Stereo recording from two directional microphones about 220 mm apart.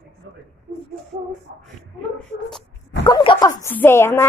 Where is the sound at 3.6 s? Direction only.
10° left (ahead or behind).